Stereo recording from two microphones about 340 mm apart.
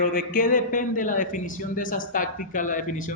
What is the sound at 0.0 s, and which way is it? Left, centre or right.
A man's voice, left.